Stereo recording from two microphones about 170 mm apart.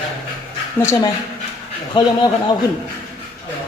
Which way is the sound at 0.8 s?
15° left (ahead or behind).